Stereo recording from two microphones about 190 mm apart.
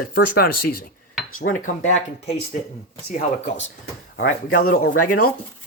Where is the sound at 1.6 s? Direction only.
40° left (ahead or behind).